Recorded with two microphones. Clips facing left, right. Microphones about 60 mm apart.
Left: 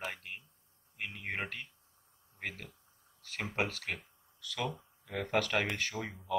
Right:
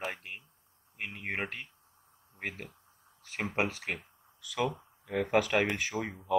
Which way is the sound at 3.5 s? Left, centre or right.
Centre.